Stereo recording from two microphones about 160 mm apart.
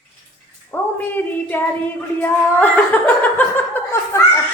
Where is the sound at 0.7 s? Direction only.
15° left (ahead or behind).